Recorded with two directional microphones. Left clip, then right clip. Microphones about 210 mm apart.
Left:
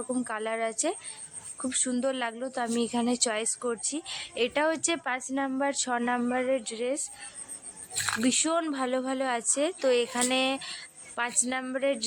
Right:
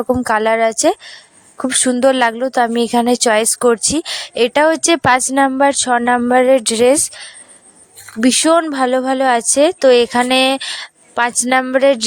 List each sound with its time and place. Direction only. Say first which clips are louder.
0.1 s speech: right 18 dB; 50° right (ahead or behind)
5.5 s speech: right 16 dB; 40° right (ahead or behind)
8.2 s speech: right 17 dB; 45° right (ahead or behind)